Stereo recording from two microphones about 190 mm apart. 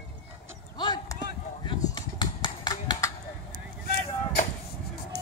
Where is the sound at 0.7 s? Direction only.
20° left (ahead or behind).